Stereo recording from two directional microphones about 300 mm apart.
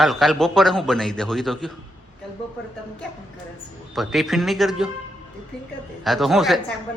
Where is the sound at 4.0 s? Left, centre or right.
Centre.